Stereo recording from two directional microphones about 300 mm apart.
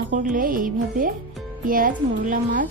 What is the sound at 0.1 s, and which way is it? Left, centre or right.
Speech, right.